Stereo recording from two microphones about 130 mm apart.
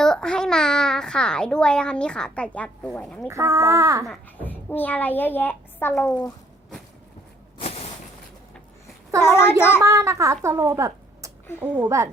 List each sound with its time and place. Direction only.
0.0 s a child's voice: 5° left (ahead or behind)
3.2 s a child's voice: 20° right (ahead or behind)
4.0 s a child's voice: 10° left (ahead or behind)
7.6 s a sound: 50° left (ahead or behind)
9.2 s a child's voice: 20° left (ahead or behind)
9.8 s a child's voice: 25° right (ahead or behind)
11.6 s a woman's voice: 10° right (ahead or behind)